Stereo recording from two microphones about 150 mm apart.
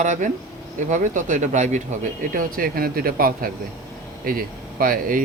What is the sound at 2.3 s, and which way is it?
Speech, 65° right (ahead or behind).